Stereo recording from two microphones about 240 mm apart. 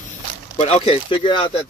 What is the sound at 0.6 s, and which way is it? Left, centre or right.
Speech, left.